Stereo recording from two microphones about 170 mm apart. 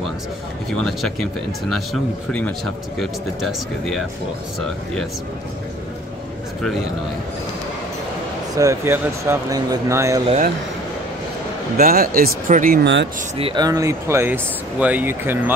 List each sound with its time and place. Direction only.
0.7 s speech: centre (ahead or behind)
2.3 s speech: 5° left (ahead or behind)
8.5 s speech: 15° right (ahead or behind)
11.7 s speech: 60° right (ahead or behind)
12.8 s speech: 90° right
13.4 s speech: 25° right (ahead or behind); by 15.5 s 10° right (ahead or behind)